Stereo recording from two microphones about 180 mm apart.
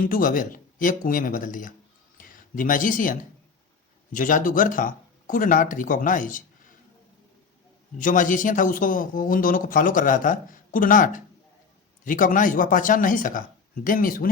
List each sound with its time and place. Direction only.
0.0 s speech: 50° left (ahead or behind)
7.9 s speech: 45° left (ahead or behind)